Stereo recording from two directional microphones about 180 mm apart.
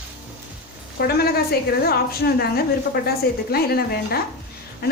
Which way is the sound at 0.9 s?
60° left (ahead or behind).